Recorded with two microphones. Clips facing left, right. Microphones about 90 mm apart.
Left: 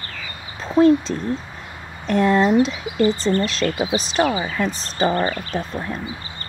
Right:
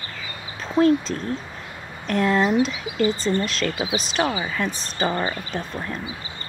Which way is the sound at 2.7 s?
35° left (ahead or behind).